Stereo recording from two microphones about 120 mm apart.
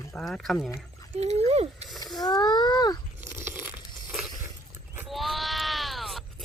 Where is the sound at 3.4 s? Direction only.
20° right (ahead or behind).